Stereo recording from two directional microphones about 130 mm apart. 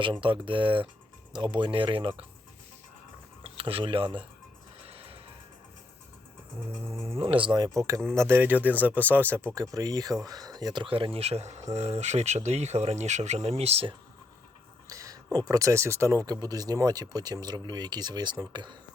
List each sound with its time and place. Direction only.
0.0 s speech: 40° right (ahead or behind)
3.4 s speech: 45° right (ahead or behind)
7.2 s speech: 45° right (ahead or behind)
14.8 s a sound: 25° right (ahead or behind)
15.4 s speech: 25° right (ahead or behind)